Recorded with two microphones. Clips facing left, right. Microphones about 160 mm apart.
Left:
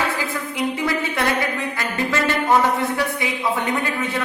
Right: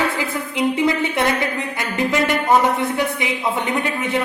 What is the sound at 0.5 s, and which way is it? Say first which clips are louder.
A woman's voice: right 5 dB; 20° right (ahead or behind).